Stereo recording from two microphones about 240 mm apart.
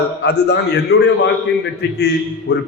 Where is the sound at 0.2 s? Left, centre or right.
Left.